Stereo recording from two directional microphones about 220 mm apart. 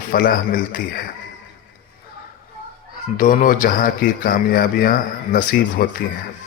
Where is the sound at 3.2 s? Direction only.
35° left (ahead or behind).